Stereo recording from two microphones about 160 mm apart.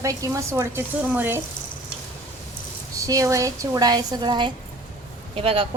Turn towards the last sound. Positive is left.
turn(degrees=-35)  # may be behind; listen again after turning